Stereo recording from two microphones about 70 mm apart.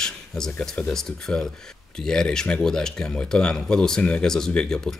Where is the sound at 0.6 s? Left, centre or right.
Centre.